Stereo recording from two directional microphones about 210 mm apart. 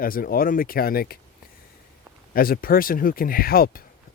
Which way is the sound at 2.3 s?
45° left (ahead or behind).